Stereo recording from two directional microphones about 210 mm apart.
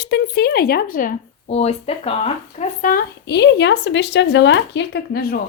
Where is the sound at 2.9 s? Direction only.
55° left (ahead or behind).